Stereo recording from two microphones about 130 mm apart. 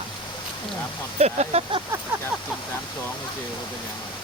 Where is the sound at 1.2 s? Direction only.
55° right (ahead or behind).